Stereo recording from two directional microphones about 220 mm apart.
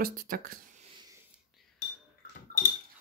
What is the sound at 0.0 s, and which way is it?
Speech, 40° right (ahead or behind).